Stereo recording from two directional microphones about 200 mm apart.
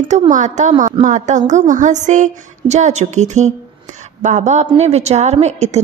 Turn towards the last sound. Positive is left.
turn(degrees=-35)  # may be behind; listen again after turning